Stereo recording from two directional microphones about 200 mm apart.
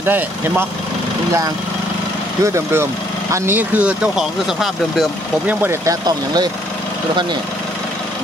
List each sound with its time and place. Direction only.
0.0 s speech: 10° right (ahead or behind)
2.4 s speech: 15° right (ahead or behind)